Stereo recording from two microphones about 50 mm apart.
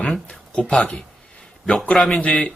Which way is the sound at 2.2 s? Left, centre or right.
Left.